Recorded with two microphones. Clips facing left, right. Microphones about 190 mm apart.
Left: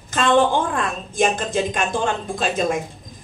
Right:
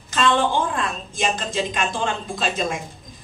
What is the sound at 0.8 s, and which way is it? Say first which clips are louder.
Speech: left 5 dB; 55° left (ahead or behind).